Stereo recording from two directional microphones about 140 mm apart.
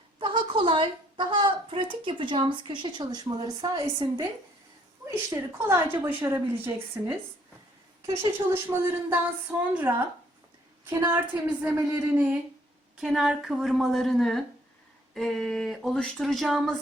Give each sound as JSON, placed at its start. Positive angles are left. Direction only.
{"t": 0.2, "sound": "a woman's voice", "side_deg": -35}
{"t": 5.3, "sound": "a woman's voice", "side_deg": -20}
{"t": 9.0, "sound": "a woman's voice", "side_deg": -15}